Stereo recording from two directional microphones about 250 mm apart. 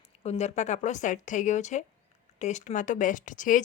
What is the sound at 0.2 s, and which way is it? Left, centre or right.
Speech, left.